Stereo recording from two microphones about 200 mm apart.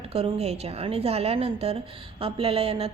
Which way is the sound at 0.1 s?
30° right (ahead or behind).